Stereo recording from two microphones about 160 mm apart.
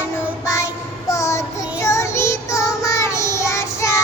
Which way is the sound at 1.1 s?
20° left (ahead or behind).